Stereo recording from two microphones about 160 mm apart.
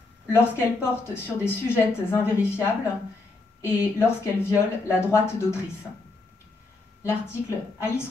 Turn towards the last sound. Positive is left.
turn(degrees=15)  # may be behind; listen again after turning